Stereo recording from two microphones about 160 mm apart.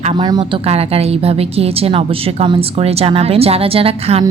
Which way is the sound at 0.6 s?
40° right (ahead or behind).